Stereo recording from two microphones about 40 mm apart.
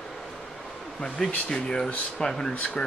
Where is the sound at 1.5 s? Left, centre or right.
Centre.